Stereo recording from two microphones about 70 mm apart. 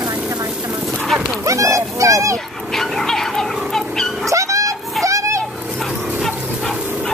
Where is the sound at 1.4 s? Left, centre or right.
Right.